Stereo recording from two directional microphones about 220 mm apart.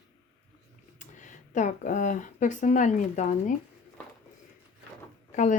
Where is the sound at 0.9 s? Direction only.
35° left (ahead or behind).